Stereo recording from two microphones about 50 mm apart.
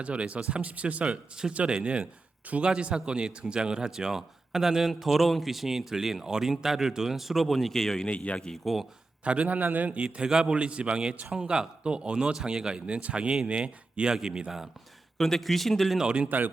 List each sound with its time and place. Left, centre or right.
0.0 s a man's voice: right; by 8.0 s centre
8.0 s a man's voice: left
8.6 s speech: centre
9.2 s a man's voice: right
12.8 s a man's voice: right; by 14.7 s centre
15.2 s speech: centre
16.0 s a man's voice: centre